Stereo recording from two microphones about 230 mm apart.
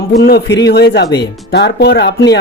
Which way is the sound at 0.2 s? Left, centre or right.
Left.